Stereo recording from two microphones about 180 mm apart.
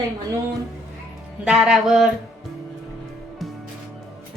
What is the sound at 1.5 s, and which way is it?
Speech, 5° right (ahead or behind).